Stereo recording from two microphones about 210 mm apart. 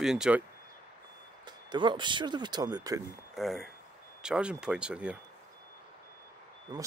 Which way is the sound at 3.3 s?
Centre (ahead or behind).